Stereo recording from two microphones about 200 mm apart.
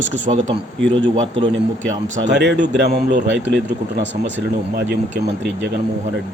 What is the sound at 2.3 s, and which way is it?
Speech, 60° right (ahead or behind).